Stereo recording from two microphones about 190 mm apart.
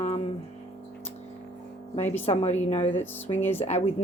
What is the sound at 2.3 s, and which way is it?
Speech, 35° left (ahead or behind).